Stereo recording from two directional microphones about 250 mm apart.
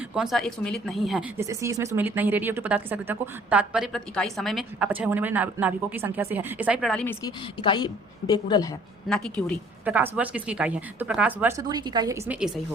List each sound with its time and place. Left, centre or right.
0.1 s a woman's voice: centre
1.4 s a woman's voice: centre
7.6 s a woman's voice: centre
9.0 s a woman's voice: centre